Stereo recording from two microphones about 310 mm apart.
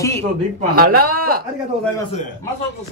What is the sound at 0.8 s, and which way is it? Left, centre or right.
Speech, right.